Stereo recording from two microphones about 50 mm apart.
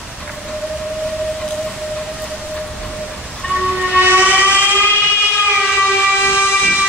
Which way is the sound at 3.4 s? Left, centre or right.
Left.